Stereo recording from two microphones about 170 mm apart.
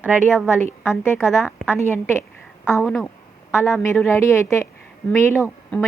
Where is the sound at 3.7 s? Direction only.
15° left (ahead or behind).